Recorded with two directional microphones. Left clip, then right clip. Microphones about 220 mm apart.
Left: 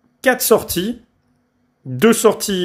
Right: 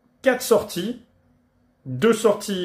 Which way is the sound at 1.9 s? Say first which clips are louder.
Left 5 dB; 50° left (ahead or behind).